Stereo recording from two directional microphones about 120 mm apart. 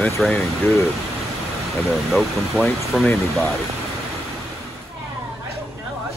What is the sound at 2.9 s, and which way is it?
Speech, centre (ahead or behind).